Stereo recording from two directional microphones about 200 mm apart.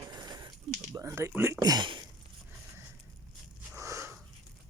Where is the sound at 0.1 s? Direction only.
20° right (ahead or behind).